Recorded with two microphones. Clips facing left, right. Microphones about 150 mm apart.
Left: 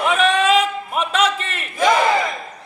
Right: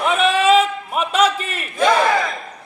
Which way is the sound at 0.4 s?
30° right (ahead or behind).